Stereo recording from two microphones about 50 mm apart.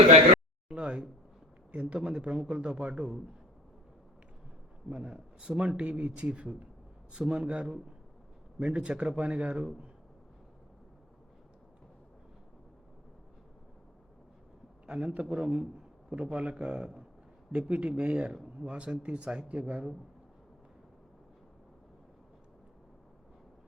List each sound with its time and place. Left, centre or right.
0.7 s a man's voice: right
4.9 s a man's voice: centre
14.8 s a man's voice: centre